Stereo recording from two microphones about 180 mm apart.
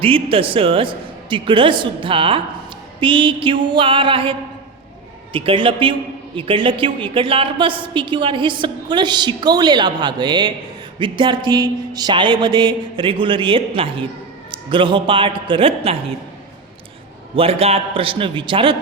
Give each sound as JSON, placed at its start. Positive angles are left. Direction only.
{"t": 0.0, "sound": "speech", "side_deg": -30}
{"t": 17.3, "sound": "speech", "side_deg": -35}